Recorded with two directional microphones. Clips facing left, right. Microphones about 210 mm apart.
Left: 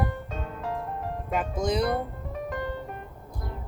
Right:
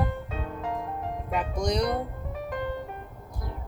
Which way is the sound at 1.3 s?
5° left (ahead or behind).